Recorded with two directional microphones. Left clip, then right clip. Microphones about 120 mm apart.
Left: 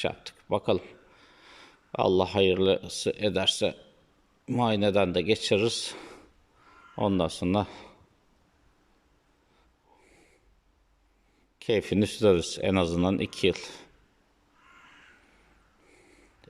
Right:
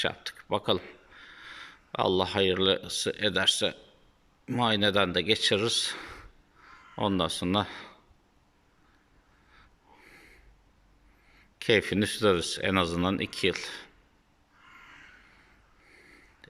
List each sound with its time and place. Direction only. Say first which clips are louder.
0.0 s speech: right 1 dB; 15° left (ahead or behind)
9.5 s snort: right 6 dB; 15° left (ahead or behind)
11.6 s speech: right 1 dB; 20° left (ahead or behind)